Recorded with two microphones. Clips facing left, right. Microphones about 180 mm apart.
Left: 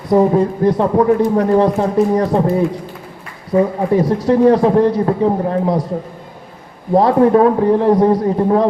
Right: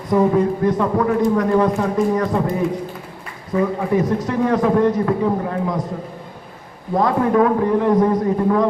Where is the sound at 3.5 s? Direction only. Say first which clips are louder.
Left 4 dB; 25° left (ahead or behind).